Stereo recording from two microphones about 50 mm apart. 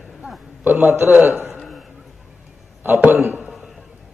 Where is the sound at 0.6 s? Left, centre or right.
Right.